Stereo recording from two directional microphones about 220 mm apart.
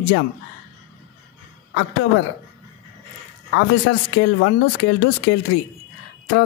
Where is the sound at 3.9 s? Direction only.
60° left (ahead or behind).